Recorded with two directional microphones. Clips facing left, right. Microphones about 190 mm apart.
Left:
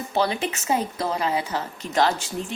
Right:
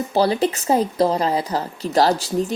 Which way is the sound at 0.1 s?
35° right (ahead or behind).